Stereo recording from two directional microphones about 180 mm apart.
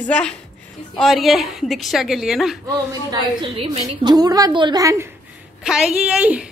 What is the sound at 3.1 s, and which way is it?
A woman's voice, 30° right (ahead or behind).